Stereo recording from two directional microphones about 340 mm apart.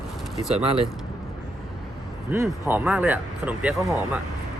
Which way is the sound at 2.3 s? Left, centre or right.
Centre.